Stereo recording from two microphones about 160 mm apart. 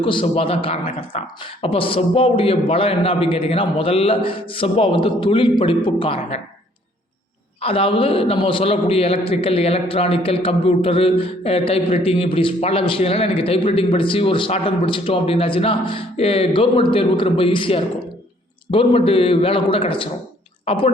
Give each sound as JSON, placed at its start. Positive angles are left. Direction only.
{"t": 0.0, "sound": "a man's voice", "side_deg": 30}
{"t": 7.6, "sound": "a man's voice", "side_deg": 35}